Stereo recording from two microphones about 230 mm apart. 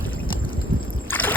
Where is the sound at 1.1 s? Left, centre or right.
Centre.